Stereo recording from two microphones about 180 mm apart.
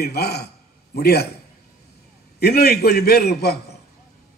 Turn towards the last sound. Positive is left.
turn(degrees=60)  # may be behind; listen again after turning